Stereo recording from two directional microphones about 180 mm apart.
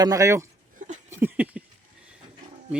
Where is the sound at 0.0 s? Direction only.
20° right (ahead or behind).